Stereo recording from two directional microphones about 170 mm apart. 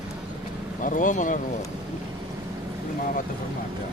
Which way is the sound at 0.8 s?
50° left (ahead or behind).